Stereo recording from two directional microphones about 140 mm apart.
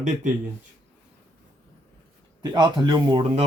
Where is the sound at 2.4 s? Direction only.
30° right (ahead or behind).